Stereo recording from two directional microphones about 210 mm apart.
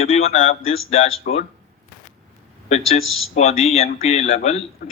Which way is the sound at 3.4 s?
30° left (ahead or behind).